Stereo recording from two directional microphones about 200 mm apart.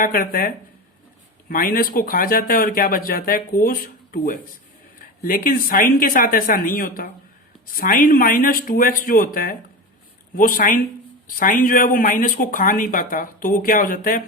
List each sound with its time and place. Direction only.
0.0 s speech: 45° left (ahead or behind)